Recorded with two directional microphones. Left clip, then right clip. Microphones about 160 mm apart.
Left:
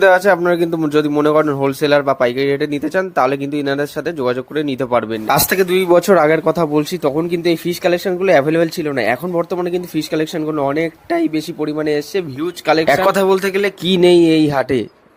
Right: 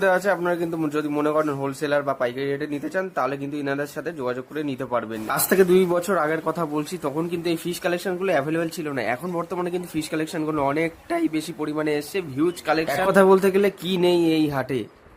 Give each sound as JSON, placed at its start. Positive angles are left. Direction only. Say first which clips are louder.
{"t": 0.0, "sound": "a man's voice", "louder": "left 9 dB", "side_deg": 35}
{"t": 13.1, "sound": "a man's voice", "louder": "left 3 dB", "side_deg": 40}